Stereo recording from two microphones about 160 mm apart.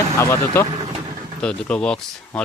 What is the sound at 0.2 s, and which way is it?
Speech, 15° left (ahead or behind).